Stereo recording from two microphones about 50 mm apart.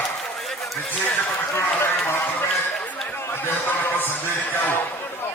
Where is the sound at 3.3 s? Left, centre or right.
Left.